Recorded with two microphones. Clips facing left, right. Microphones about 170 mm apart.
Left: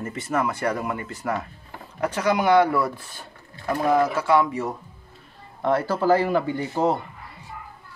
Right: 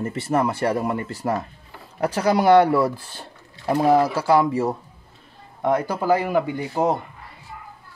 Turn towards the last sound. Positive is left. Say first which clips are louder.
# right 1 dB
turn(degrees=-15)  # may be behind; listen again after turning